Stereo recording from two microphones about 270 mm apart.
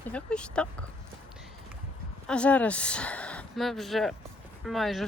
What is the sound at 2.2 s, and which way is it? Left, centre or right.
Speech, centre.